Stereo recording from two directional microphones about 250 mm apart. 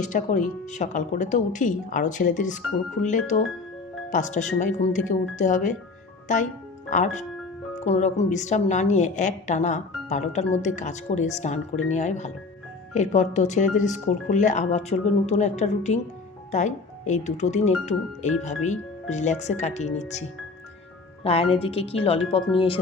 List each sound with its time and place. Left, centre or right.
0.0 s a woman's voice: left
21.2 s a woman's voice: left